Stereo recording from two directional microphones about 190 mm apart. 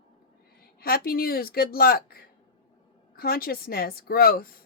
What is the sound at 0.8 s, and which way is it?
A woman's voice, 50° left (ahead or behind).